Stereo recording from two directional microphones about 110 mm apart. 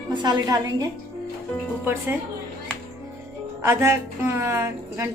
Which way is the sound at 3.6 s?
25° right (ahead or behind).